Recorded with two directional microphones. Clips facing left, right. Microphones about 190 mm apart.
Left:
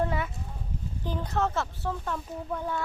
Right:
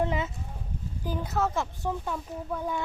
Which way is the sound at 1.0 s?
10° right (ahead or behind).